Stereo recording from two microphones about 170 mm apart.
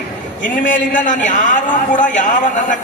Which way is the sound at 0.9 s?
50° left (ahead or behind).